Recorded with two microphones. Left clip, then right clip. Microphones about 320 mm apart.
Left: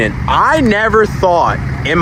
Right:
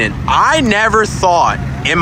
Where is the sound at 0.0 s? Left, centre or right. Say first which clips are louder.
Even; centre.